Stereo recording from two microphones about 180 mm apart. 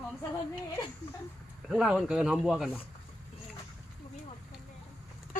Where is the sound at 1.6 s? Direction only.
5° right (ahead or behind).